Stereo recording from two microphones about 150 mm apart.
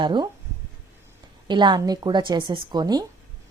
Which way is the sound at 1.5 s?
30° right (ahead or behind).